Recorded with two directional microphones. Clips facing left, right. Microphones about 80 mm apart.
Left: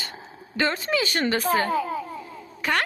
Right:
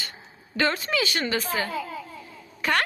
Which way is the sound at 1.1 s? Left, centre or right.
Left.